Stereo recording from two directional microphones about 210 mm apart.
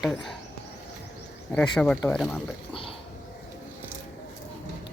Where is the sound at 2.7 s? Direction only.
25° left (ahead or behind).